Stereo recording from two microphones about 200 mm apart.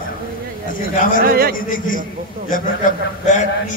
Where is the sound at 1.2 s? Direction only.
50° right (ahead or behind).